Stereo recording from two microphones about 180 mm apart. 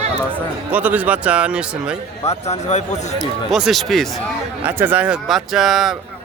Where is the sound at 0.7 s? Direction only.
10° right (ahead or behind).